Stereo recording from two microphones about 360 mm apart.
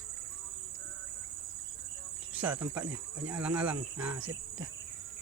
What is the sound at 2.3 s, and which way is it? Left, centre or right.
Cricket, centre.